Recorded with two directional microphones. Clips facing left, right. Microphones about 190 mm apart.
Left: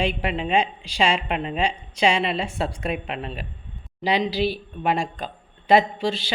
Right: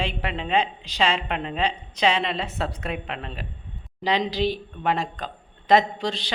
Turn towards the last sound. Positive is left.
turn(degrees=5)  # may be behind; listen again after turning